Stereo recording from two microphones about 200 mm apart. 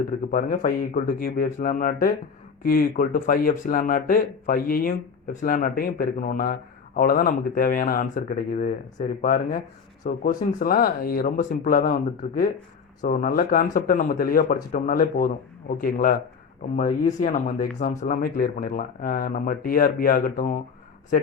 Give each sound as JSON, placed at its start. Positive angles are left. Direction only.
{"t": 0.3, "sound": "speech", "side_deg": 45}